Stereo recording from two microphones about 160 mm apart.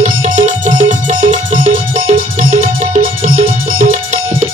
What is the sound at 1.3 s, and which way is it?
Music, 50° right (ahead or behind).